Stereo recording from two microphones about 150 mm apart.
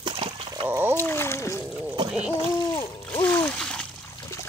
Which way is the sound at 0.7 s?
15° right (ahead or behind).